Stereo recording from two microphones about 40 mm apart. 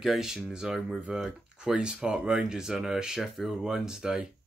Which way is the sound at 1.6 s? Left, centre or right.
Right.